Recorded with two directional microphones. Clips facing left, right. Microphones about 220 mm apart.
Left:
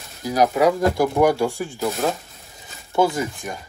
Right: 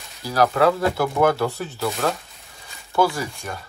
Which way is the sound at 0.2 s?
20° left (ahead or behind).